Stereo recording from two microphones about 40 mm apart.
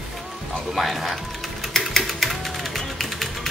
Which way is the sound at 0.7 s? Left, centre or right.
Centre.